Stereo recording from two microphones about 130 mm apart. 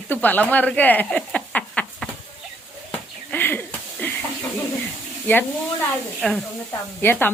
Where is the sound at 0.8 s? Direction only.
15° left (ahead or behind).